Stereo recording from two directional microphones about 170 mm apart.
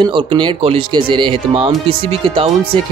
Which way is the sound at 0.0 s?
30° right (ahead or behind).